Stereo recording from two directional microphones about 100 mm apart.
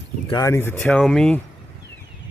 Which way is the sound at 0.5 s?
20° left (ahead or behind).